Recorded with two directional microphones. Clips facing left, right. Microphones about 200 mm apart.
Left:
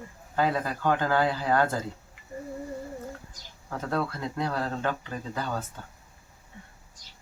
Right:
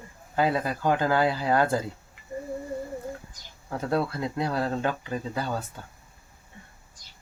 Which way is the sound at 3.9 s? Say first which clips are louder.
Right 3 dB; 10° right (ahead or behind).